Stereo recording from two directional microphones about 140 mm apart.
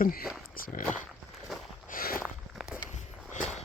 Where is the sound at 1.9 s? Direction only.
90° left.